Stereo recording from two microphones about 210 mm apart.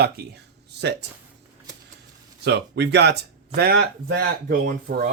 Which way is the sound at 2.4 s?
55° right (ahead or behind).